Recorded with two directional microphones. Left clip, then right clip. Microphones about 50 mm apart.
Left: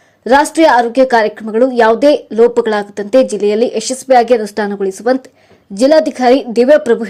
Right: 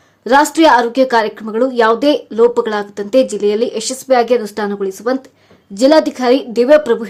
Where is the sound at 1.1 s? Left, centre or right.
Left.